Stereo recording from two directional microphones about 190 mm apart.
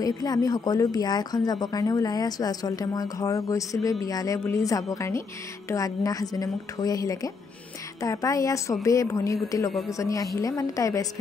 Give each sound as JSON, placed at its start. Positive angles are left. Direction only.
{"t": 0.0, "sound": "a woman's voice", "side_deg": 20}